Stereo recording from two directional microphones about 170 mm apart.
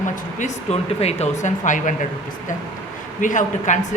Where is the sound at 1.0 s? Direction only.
40° left (ahead or behind).